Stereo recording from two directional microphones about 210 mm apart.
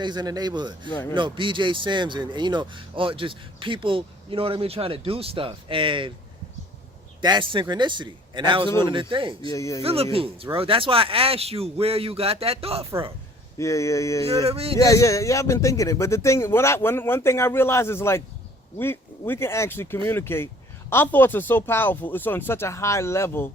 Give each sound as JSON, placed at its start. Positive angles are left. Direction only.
{"t": 0.0, "sound": "speech", "side_deg": -20}
{"t": 7.2, "sound": "speech", "side_deg": -20}
{"t": 9.5, "sound": "speech", "side_deg": 15}
{"t": 9.8, "sound": "speech", "side_deg": -30}
{"t": 13.6, "sound": "speech", "side_deg": 15}
{"t": 14.4, "sound": "speech", "side_deg": -30}
{"t": 14.8, "sound": "speech", "side_deg": 15}